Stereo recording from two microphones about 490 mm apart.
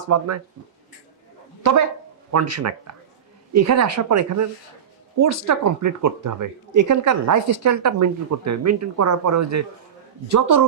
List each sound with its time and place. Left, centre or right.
0.1 s speech: right
2.3 s speech: right